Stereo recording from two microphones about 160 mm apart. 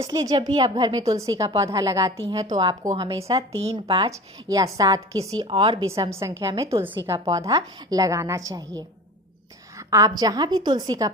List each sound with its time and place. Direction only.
0.0 s a woman's voice: 25° right (ahead or behind)
3.3 s speech: 40° right (ahead or behind)
4.1 s a woman's voice: 20° right (ahead or behind)
5.9 s a woman's voice: 15° right (ahead or behind)